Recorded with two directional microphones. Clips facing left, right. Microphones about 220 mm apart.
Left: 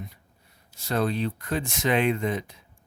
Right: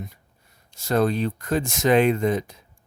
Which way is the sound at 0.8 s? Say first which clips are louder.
Right 5 dB; 45° right (ahead or behind).